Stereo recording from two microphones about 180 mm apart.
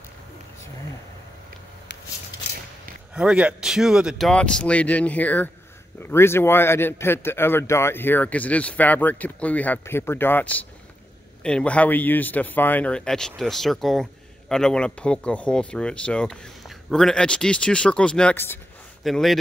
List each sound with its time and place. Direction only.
3.2 s speech: 5° right (ahead or behind); by 18.6 s 10° left (ahead or behind)
19.0 s speech: centre (ahead or behind)